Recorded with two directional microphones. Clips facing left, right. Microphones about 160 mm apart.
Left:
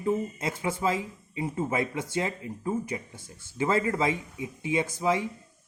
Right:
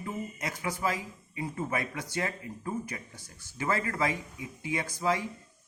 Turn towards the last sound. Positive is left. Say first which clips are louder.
# left 4 dB
turn(degrees=20)  # may be behind; listen again after turning